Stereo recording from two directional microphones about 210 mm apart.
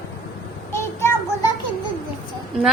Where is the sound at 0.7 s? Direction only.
10° left (ahead or behind).